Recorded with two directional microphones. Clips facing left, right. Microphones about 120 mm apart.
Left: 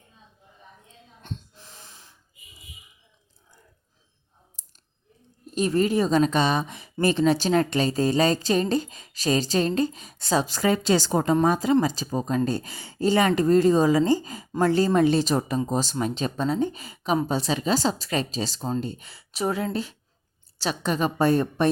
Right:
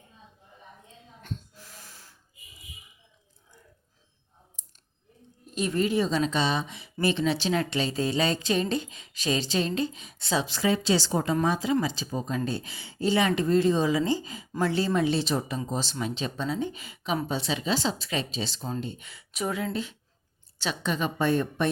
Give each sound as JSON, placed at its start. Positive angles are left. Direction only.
{"t": 1.2, "sound": "wheeze", "side_deg": 25}
{"t": 4.6, "sound": "clicking", "side_deg": 35}
{"t": 5.5, "sound": "a woman's voice", "side_deg": 40}